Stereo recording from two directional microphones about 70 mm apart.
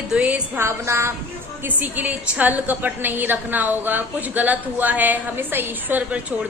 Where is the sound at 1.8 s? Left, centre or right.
Right.